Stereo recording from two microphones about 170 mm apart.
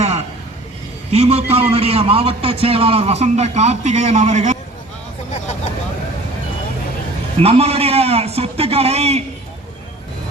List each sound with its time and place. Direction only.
1.1 s a man's voice: 35° right (ahead or behind)
7.3 s a man's voice: 35° right (ahead or behind)